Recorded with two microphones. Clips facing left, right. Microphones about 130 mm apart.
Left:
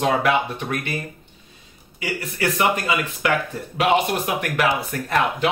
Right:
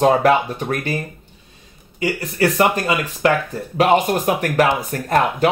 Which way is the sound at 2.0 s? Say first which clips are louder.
Right 7 dB; 35° right (ahead or behind).